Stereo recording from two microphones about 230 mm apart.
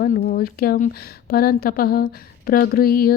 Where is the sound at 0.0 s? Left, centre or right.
Left.